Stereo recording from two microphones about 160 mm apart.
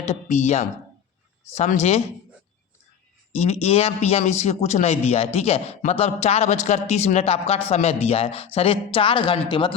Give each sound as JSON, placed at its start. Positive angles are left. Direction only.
{"t": 0.1, "sound": "speech", "side_deg": 45}
{"t": 1.7, "sound": "speech", "side_deg": 45}
{"t": 3.3, "sound": "a man's voice", "side_deg": 40}